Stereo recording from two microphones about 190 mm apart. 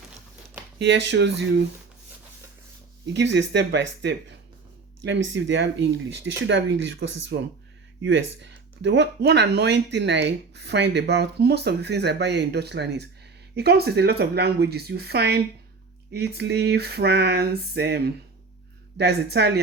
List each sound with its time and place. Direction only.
0.8 s speech: 65° right (ahead or behind)
3.1 s speech: 65° right (ahead or behind)